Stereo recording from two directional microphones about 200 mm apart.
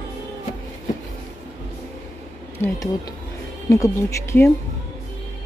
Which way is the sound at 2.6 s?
10° left (ahead or behind).